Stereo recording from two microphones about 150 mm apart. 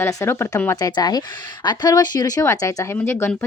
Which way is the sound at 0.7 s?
25° left (ahead or behind).